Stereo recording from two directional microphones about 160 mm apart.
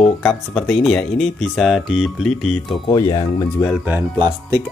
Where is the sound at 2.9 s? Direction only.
25° left (ahead or behind).